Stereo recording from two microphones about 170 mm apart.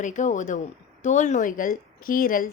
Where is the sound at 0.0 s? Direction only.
45° left (ahead or behind).